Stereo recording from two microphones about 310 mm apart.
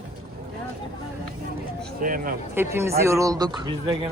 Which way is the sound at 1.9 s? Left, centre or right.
Right.